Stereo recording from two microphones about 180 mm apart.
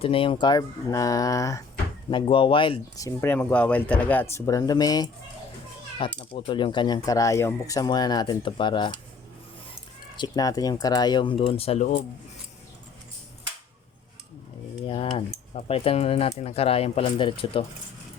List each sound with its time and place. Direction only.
0.0 s speech: 30° left (ahead or behind)
2.0 s speech: 25° left (ahead or behind)
10.2 s speech: 20° left (ahead or behind); by 12.0 s 40° left (ahead or behind)
15.5 s speech: 35° left (ahead or behind)